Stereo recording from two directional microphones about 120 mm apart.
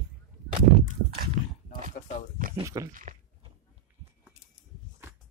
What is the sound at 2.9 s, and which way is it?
Speech, 90° right.